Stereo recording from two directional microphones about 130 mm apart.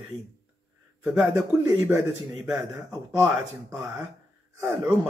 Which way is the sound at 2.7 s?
20° right (ahead or behind).